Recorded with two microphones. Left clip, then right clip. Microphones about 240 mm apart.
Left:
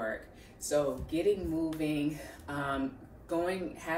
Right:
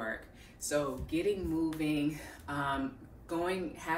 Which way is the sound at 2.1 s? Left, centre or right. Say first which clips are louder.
Even; centre.